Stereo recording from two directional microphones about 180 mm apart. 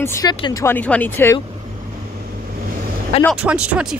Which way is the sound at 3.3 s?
5° right (ahead or behind).